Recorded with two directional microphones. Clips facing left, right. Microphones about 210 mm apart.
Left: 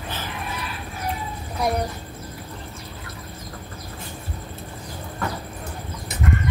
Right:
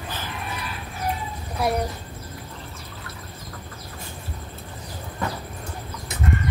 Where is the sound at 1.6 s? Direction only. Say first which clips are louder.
Even; 5° right (ahead or behind).